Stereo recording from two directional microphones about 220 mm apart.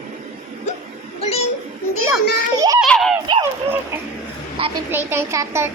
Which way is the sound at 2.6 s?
15° right (ahead or behind).